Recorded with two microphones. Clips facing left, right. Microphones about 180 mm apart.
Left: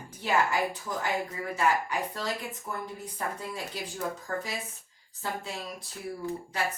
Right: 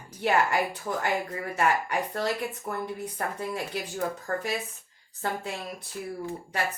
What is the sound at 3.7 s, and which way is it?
Speech, 60° right (ahead or behind).